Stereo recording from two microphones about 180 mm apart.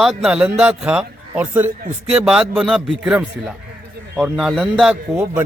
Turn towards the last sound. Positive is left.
turn(degrees=-5)  # may be behind; listen again after turning